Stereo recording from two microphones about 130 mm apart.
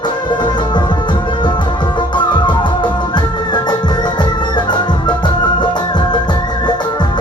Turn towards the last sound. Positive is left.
turn(degrees=35)  # may be behind; listen again after turning